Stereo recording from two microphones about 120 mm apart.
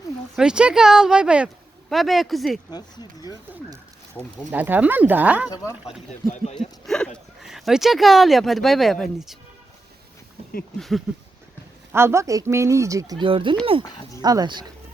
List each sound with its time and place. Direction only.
0.3 s speech: 5° right (ahead or behind)
2.7 s speech: 35° left (ahead or behind)
4.4 s speech: 15° right (ahead or behind)
6.8 s a sound: 5° left (ahead or behind)
7.4 s speech: 5° right (ahead or behind)
10.8 s speech: centre (ahead or behind)
11.9 s speech: 20° right (ahead or behind)
13.2 s speech: 45° right (ahead or behind)
13.8 s speech: 40° left (ahead or behind)
14.2 s speech: 30° right (ahead or behind)